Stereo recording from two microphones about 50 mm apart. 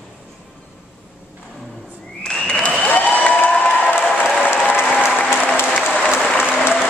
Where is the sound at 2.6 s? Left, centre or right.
Left.